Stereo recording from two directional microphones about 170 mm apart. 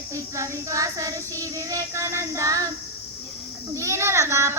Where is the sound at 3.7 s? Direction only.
15° right (ahead or behind).